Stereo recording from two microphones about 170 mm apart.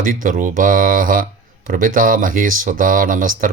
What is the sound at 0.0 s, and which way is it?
Speech, 50° right (ahead or behind).